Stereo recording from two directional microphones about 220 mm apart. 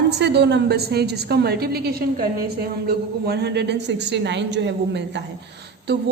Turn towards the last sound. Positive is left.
turn(degrees=-50)  # may be behind; listen again after turning